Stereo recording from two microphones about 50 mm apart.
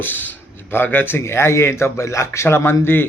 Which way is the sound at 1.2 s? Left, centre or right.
Left.